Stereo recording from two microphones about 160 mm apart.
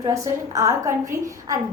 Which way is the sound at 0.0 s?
20° right (ahead or behind).